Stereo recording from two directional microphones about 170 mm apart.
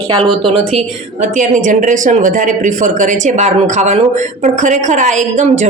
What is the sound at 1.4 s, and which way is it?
Speech, 50° right (ahead or behind).